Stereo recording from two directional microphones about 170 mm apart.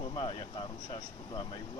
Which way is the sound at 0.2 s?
30° left (ahead or behind).